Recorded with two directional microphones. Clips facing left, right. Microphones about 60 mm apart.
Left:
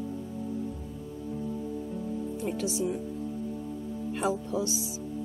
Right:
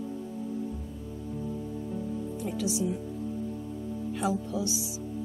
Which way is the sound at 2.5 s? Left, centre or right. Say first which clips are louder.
Right 1 dB; left.